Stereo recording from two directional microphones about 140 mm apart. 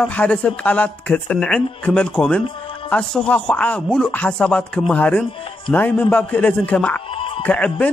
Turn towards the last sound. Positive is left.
turn(degrees=10)  # may be behind; listen again after turning